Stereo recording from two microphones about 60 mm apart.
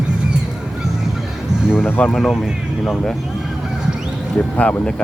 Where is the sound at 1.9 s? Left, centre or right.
Left.